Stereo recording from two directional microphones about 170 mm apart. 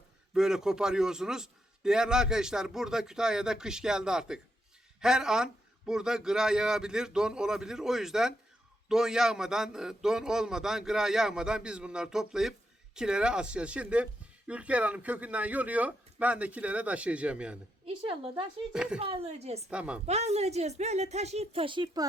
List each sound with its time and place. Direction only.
0.3 s a man's voice: 5° right (ahead or behind)
17.8 s a woman's voice: 35° right (ahead or behind)
18.7 s a man's voice: 5° right (ahead or behind)
18.9 s a woman's voice: 35° right (ahead or behind)
19.7 s a woman's voice: 5° right (ahead or behind)
20.1 s a woman's voice: 40° right (ahead or behind)